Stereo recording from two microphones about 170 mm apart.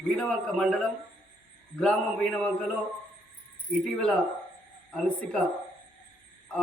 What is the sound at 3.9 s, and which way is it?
A man's voice, 5° left (ahead or behind).